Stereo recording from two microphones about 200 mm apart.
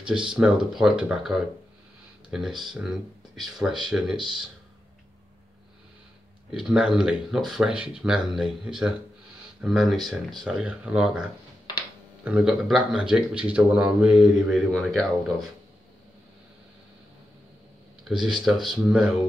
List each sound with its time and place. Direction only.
0.0 s speech: 25° right (ahead or behind)
0.7 s speech: 5° right (ahead or behind)
6.5 s speech: 5° right (ahead or behind)
12.3 s speech: 5° right (ahead or behind)
18.0 s speech: centre (ahead or behind)